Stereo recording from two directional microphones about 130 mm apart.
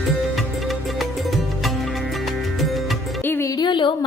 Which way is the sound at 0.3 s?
Centre (ahead or behind).